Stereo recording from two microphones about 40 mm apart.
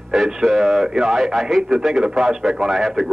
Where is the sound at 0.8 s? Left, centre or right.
Centre.